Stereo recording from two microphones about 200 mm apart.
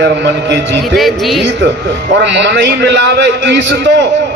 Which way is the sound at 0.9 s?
Centre (ahead or behind).